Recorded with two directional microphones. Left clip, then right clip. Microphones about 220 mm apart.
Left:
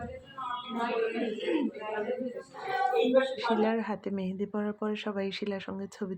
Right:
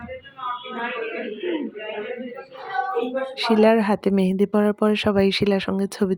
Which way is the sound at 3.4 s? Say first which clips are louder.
Right 11 dB; 50° right (ahead or behind).